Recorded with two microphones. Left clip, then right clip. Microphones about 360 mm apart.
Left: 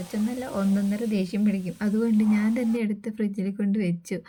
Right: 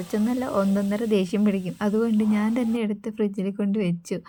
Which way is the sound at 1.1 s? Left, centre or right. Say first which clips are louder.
Right 5 dB; centre.